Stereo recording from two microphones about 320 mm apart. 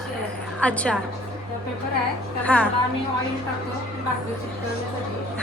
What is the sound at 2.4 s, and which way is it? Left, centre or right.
Speech, centre.